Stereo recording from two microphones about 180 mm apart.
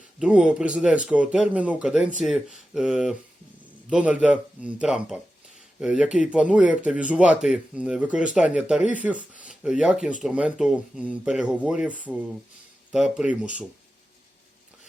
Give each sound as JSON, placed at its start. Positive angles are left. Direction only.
{"t": 0.2, "sound": "speech", "side_deg": -5}
{"t": 8.8, "sound": "speech", "side_deg": 45}
{"t": 9.4, "sound": "speech", "side_deg": -5}